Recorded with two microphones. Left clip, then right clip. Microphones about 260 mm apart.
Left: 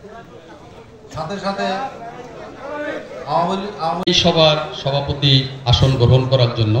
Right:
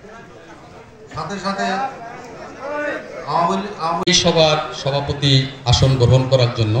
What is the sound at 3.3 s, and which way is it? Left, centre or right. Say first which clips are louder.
A man's voice: right 1 dB; centre.